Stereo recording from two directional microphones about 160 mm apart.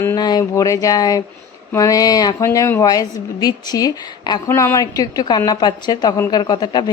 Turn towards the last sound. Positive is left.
turn(degrees=25)  # may be behind; listen again after turning